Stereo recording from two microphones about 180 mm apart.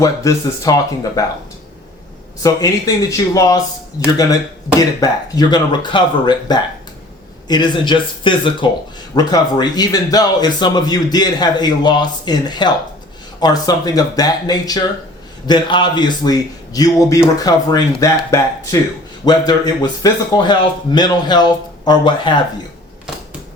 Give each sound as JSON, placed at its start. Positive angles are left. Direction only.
{"t": 0.0, "sound": "a man's voice", "side_deg": 20}
{"t": 2.4, "sound": "a man's voice", "side_deg": 20}